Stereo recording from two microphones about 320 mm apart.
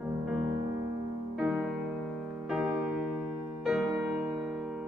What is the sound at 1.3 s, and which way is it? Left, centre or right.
Music, centre.